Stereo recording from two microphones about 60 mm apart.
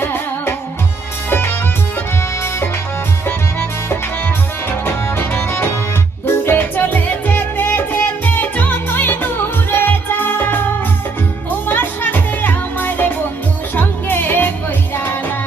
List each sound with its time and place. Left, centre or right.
0.0 s music: left
5.0 s music: left